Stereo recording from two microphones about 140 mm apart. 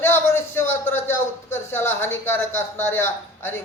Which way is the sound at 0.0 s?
15° left (ahead or behind).